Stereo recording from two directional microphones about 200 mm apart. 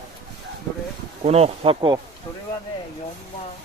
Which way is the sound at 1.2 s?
30° right (ahead or behind).